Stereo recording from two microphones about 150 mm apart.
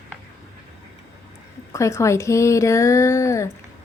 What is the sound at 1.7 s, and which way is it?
A woman's voice, 20° left (ahead or behind).